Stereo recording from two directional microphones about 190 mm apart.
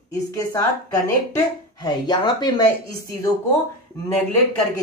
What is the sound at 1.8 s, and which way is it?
Speech, 20° left (ahead or behind).